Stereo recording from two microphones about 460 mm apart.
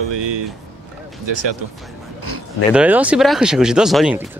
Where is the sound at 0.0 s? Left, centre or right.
Right.